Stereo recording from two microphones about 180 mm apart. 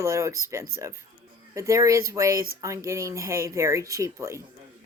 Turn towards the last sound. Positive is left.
turn(degrees=-15)  # may be behind; listen again after turning